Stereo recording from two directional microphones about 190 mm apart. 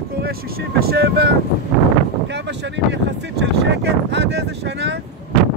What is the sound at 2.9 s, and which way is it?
Speech, 65° right (ahead or behind).